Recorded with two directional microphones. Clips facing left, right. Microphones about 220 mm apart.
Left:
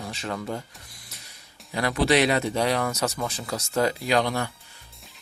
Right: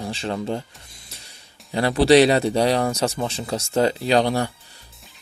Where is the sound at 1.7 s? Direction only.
30° right (ahead or behind).